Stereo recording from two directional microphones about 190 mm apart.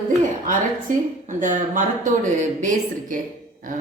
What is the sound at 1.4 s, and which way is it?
Speech, 45° right (ahead or behind).